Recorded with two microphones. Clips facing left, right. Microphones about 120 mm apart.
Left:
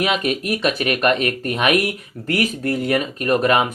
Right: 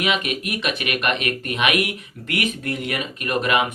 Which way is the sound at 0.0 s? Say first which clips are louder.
Left 3 dB; 35° left (ahead or behind).